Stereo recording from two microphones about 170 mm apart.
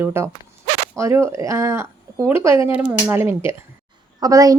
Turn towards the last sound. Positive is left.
turn(degrees=-20)  # may be behind; listen again after turning